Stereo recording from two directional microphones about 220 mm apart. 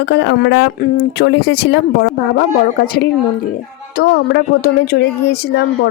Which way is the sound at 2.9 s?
40° left (ahead or behind).